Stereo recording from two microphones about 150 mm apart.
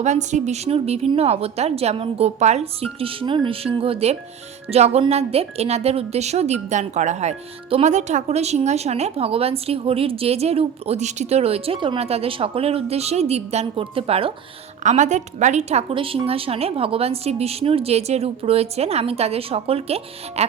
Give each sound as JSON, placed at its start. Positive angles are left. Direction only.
{"t": 0.0, "sound": "speech", "side_deg": -50}
{"t": 14.8, "sound": "speech", "side_deg": -50}